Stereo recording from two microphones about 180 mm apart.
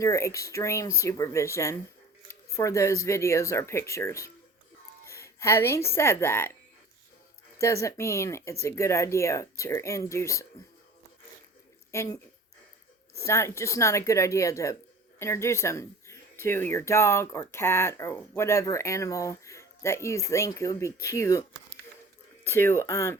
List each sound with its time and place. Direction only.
0.0 s speech: 15° left (ahead or behind)
7.6 s speech: 15° left (ahead or behind)
11.9 s speech: 15° left (ahead or behind)
13.1 s speech: 15° left (ahead or behind)
22.4 s speech: 10° left (ahead or behind)